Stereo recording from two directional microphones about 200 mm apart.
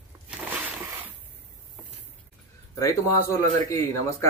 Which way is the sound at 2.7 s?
15° left (ahead or behind).